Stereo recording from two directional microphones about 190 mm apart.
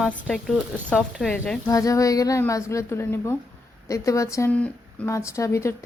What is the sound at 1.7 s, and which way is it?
Speech, 15° left (ahead or behind).